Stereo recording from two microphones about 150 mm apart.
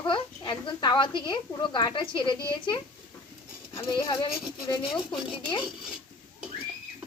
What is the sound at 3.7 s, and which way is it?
Speech, 20° left (ahead or behind).